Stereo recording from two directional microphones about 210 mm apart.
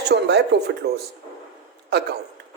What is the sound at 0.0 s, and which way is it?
A man's voice, 50° right (ahead or behind).